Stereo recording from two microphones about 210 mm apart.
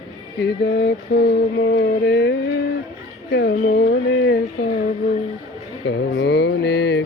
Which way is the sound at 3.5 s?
40° left (ahead or behind).